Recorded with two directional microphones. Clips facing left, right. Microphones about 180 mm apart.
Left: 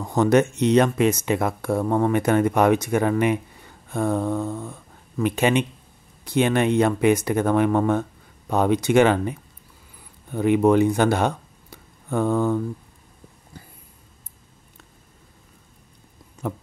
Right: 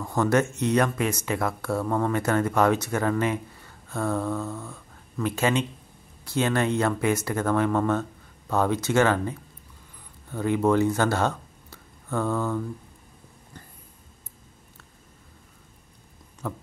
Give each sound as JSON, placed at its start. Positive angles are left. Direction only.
{"t": 0.0, "sound": "speech", "side_deg": 20}
{"t": 16.4, "sound": "speech", "side_deg": 20}